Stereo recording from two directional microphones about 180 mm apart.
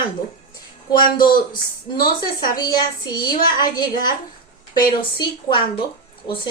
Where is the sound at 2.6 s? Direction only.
25° left (ahead or behind).